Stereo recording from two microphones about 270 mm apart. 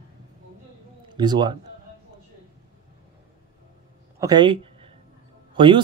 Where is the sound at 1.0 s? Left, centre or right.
Centre.